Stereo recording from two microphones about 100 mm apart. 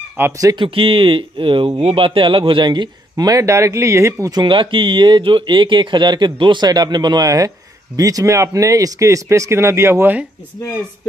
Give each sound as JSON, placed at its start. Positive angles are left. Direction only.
{"t": 0.2, "sound": "speech", "side_deg": -20}
{"t": 0.6, "sound": "a man's voice", "side_deg": -65}